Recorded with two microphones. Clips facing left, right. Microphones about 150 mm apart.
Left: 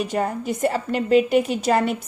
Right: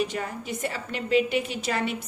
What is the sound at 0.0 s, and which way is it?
A woman's voice, 45° left (ahead or behind).